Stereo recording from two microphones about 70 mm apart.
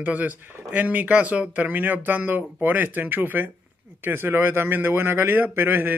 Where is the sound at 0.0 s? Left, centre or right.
Right.